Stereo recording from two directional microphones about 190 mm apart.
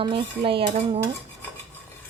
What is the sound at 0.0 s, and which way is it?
Dishes, 25° right (ahead or behind).